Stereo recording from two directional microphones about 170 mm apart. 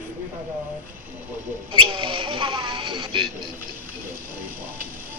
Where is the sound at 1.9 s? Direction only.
30° right (ahead or behind).